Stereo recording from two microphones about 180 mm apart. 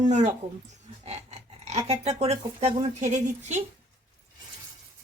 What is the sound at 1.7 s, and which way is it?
Speech, 35° right (ahead or behind).